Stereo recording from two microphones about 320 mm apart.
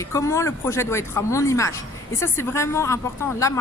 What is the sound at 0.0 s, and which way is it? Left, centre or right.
Speech, centre.